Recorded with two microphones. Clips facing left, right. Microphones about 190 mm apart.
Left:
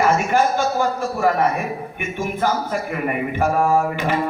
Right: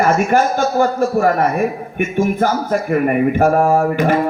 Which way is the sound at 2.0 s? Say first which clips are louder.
Right 8 dB; 45° right (ahead or behind).